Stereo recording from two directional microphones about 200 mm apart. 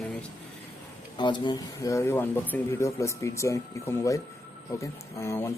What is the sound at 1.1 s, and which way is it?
Speech, 25° left (ahead or behind).